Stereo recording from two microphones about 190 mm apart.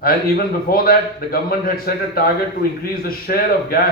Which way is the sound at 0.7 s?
50° left (ahead or behind).